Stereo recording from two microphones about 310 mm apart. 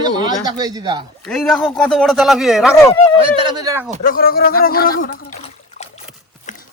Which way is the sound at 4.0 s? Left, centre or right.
Left.